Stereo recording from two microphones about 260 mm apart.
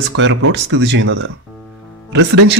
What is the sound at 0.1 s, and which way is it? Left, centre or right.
Speech, right.